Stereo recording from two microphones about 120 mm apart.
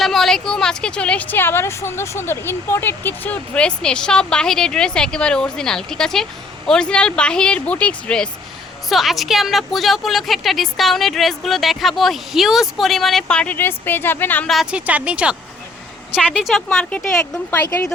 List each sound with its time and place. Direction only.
0.0 s a woman's voice: centre (ahead or behind)
14.4 s a woman's voice: centre (ahead or behind)
17.7 s a woman's voice: 20° left (ahead or behind)